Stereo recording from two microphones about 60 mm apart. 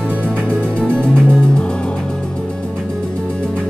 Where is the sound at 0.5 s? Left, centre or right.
Centre.